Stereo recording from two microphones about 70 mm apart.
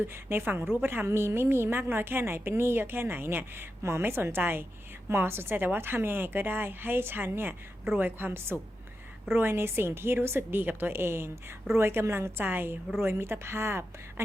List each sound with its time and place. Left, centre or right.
0.1 s a woman's voice: right